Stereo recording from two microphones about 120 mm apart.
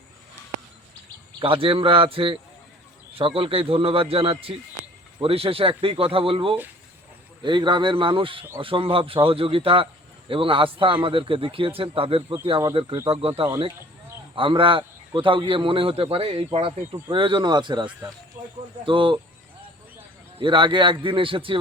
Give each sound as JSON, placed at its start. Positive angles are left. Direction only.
{"t": 1.4, "sound": "a man's voice", "side_deg": -50}
{"t": 18.4, "sound": "a sound", "side_deg": -20}
{"t": 18.9, "sound": "a man's voice", "side_deg": -45}
{"t": 20.4, "sound": "a man's voice", "side_deg": -40}